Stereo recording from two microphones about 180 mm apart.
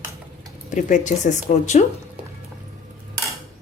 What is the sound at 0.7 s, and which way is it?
Speech, 45° left (ahead or behind).